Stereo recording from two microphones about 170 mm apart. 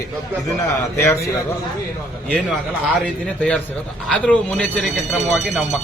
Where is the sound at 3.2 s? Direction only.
5° left (ahead or behind).